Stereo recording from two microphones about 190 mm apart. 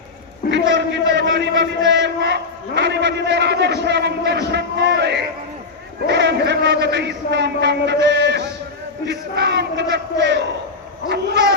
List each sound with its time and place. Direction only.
0.7 s a man's voice: 65° right (ahead or behind)